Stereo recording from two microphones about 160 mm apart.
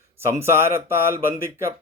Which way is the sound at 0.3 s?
15° right (ahead or behind).